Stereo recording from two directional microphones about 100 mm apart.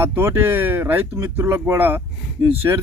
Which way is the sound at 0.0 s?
20° right (ahead or behind).